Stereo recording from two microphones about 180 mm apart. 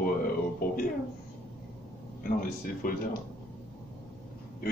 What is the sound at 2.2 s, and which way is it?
Speech, 50° left (ahead or behind).